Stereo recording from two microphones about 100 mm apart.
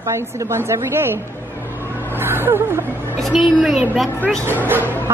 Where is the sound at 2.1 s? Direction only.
20° right (ahead or behind).